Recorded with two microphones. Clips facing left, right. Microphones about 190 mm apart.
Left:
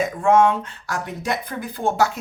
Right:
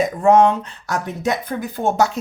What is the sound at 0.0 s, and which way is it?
Speech, 40° right (ahead or behind).